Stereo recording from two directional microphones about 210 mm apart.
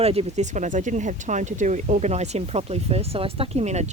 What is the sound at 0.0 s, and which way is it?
Speech, 30° right (ahead or behind).